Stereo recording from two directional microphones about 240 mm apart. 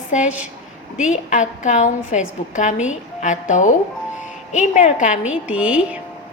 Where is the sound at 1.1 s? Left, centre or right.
Left.